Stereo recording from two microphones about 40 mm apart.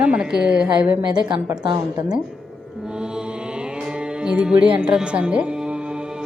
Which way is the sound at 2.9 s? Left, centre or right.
Right.